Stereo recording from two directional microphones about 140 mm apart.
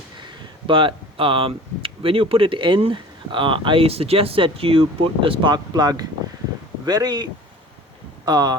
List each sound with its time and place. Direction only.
0.7 s speech: 40° right (ahead or behind)